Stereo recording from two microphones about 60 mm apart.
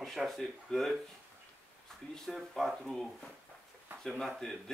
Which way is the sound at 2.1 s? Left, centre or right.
Centre.